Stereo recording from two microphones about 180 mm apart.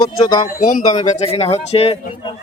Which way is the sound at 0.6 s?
50° left (ahead or behind).